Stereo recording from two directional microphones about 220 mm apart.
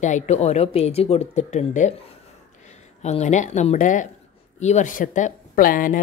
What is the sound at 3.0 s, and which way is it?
Speech, 30° left (ahead or behind).